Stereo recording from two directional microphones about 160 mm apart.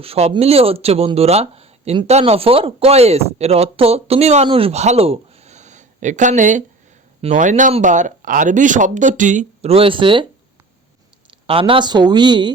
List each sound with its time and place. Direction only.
0.0 s speech: 40° right (ahead or behind)
11.3 s speech: 35° right (ahead or behind)